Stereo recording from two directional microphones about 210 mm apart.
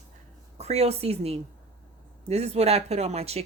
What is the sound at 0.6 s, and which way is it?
A woman's voice, 30° right (ahead or behind).